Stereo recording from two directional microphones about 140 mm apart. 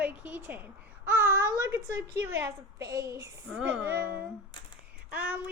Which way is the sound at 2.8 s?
25° right (ahead or behind).